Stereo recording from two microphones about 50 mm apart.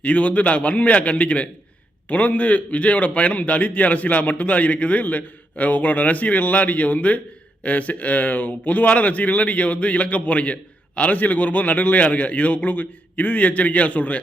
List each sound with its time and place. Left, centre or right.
0.0 s a man's voice: left